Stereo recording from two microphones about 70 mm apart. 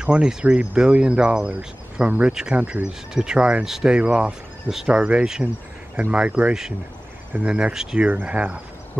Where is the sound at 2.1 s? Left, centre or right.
Centre.